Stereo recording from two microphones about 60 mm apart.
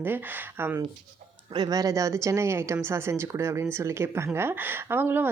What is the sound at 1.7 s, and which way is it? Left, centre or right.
A woman's voice, right.